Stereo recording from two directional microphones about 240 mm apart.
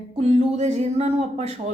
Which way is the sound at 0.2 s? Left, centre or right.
Right.